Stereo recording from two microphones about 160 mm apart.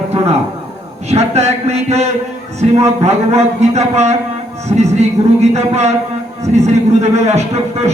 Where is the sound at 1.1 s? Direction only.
40° right (ahead or behind).